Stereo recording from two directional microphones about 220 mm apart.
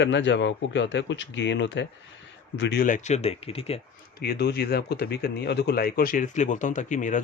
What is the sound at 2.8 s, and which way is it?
Speech, 35° left (ahead or behind).